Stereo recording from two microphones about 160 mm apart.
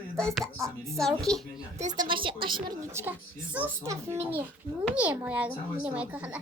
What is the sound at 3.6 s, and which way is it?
A child's voice, 20° right (ahead or behind).